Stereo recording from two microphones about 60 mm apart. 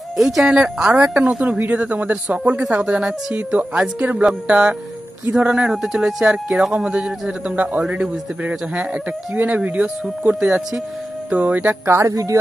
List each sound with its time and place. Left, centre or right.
0.2 s a man's voice: centre; by 11.7 s right
11.8 s speech: right
12.1 s speech: right